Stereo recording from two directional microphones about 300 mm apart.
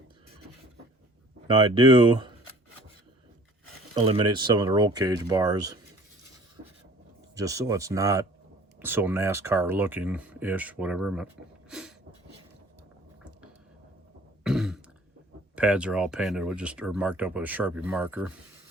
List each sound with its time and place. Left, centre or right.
1.5 s speech: centre
3.9 s speech: centre
7.3 s speech: centre
11.7 s a sound: centre
14.4 s throat clearing: centre
15.5 s speech: centre